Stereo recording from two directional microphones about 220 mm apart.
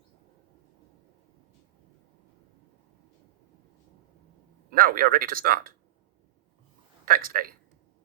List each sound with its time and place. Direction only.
4.7 s speech: 40° right (ahead or behind)
7.0 s speech: 40° right (ahead or behind)